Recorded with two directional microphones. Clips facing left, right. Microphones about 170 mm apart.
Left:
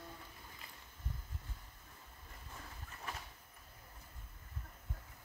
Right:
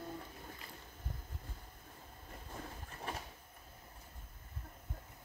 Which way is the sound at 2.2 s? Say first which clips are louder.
Right 6 dB; 40° right (ahead or behind).